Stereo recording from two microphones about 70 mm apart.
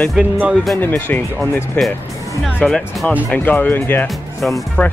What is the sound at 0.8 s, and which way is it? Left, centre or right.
Speech, left.